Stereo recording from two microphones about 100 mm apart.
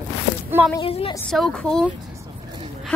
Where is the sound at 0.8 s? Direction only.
65° left (ahead or behind).